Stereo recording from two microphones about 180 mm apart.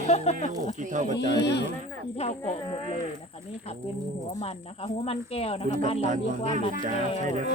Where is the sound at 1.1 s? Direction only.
70° left (ahead or behind).